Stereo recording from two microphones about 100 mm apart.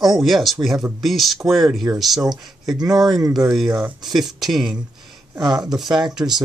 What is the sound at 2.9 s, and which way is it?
Speech, 45° right (ahead or behind).